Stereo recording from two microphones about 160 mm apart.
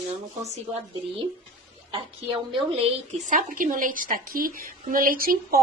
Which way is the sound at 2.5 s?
35° right (ahead or behind).